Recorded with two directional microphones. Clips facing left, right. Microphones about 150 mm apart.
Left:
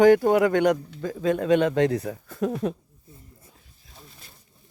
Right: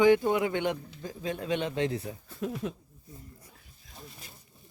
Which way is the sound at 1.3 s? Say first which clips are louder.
Left 11 dB; 55° left (ahead or behind).